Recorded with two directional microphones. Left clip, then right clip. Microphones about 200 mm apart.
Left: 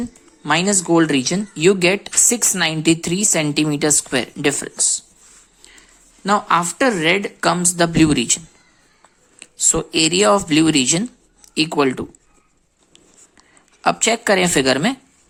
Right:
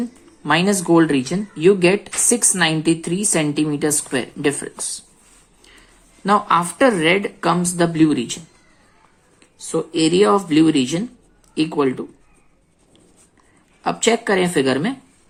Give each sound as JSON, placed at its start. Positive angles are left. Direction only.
{"t": 0.0, "sound": "speech", "side_deg": 20}
{"t": 6.2, "sound": "speech", "side_deg": 20}
{"t": 9.4, "sound": "speech", "side_deg": 35}
{"t": 13.8, "sound": "speech", "side_deg": 30}